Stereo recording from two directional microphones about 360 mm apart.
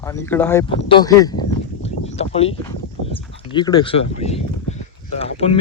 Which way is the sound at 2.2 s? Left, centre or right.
Centre.